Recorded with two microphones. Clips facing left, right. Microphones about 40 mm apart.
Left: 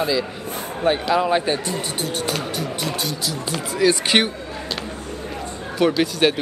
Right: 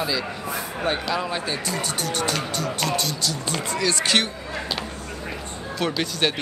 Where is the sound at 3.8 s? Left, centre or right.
Centre.